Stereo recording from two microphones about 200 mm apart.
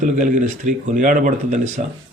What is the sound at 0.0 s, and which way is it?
Speech, 40° right (ahead or behind).